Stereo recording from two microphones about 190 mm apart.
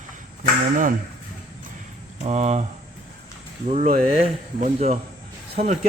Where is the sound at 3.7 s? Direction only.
35° right (ahead or behind).